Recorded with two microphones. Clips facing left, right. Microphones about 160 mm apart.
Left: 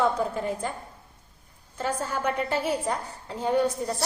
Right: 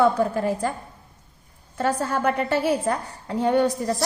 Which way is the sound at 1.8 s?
65° right (ahead or behind).